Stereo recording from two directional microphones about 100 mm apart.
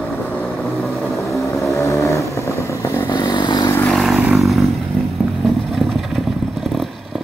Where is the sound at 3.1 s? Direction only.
50° left (ahead or behind).